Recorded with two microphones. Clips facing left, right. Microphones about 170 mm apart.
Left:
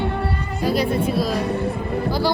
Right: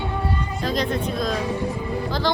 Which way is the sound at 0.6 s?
10° left (ahead or behind).